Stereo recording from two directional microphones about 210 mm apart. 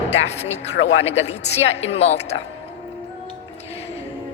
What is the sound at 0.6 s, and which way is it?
Speech, 60° left (ahead or behind).